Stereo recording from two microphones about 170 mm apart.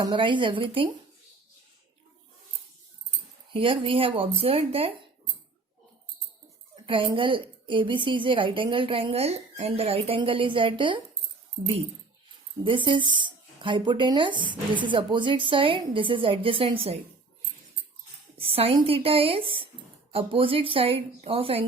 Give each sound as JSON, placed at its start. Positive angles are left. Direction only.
{"t": 0.0, "sound": "speech", "side_deg": -25}
{"t": 3.5, "sound": "a woman's voice", "side_deg": -30}
{"t": 6.7, "sound": "a woman's voice", "side_deg": -30}
{"t": 12.6, "sound": "speech", "side_deg": -30}
{"t": 18.3, "sound": "a woman's voice", "side_deg": -35}